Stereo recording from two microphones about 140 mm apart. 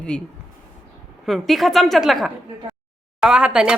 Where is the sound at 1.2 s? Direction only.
Centre (ahead or behind).